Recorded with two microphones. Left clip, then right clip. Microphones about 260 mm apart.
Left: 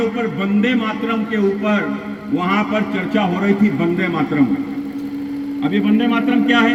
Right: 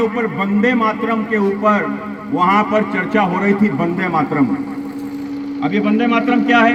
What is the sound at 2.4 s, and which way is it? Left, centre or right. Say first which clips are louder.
A man's voice: right 6 dB; right.